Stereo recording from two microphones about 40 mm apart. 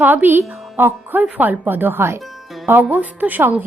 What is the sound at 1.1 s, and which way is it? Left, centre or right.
Speech, right.